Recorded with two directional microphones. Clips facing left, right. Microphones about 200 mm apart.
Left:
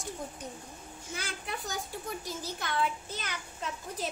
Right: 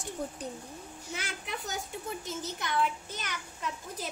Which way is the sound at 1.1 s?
20° right (ahead or behind).